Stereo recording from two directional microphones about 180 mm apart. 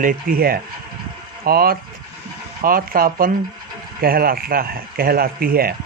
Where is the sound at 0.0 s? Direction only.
50° right (ahead or behind).